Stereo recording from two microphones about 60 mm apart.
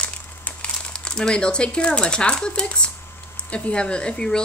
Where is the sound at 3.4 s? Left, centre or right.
Centre.